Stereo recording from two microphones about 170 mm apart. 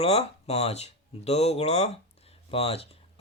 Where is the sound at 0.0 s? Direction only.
35° left (ahead or behind).